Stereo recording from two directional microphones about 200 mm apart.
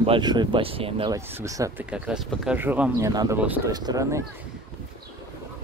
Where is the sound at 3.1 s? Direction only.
20° right (ahead or behind).